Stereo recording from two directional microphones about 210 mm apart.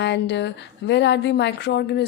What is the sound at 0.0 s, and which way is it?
A woman's voice, 55° left (ahead or behind).